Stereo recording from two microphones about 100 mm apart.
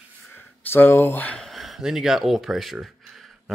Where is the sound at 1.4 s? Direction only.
Centre (ahead or behind).